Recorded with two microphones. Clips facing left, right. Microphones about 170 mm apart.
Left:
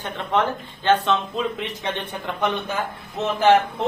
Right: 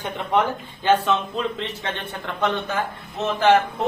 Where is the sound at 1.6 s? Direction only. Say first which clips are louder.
Left 1 dB; 15° left (ahead or behind).